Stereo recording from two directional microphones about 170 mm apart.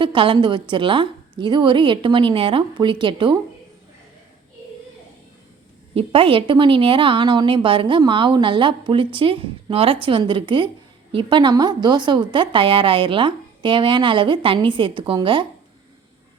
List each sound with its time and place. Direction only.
0.0 s a woman's voice: 30° right (ahead or behind)
5.9 s a woman's voice: 35° right (ahead or behind)